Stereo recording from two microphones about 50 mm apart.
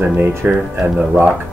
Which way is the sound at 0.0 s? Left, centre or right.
Right.